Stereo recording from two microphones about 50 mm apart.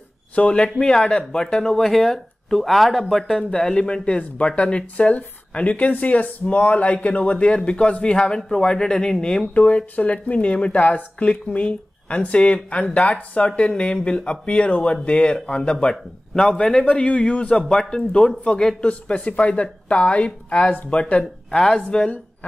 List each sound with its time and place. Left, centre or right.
0.4 s speech: left
9.5 s speech: left
17.6 s speech: centre
21.5 s speech: centre